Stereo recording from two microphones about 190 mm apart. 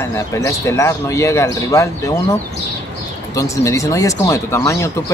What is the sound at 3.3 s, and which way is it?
Speech, 15° left (ahead or behind).